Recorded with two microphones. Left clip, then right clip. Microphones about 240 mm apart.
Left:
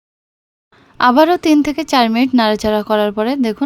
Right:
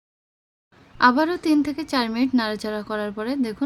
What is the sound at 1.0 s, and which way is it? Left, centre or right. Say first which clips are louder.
A woman's voice: left 8 dB; left.